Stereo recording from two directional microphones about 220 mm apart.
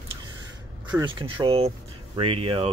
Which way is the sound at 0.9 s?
20° right (ahead or behind).